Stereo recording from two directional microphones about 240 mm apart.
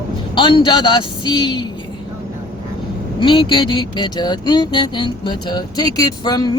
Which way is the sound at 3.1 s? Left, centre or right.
Centre.